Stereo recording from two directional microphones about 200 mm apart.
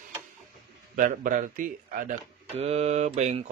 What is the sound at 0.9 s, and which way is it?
A man's voice, 40° right (ahead or behind).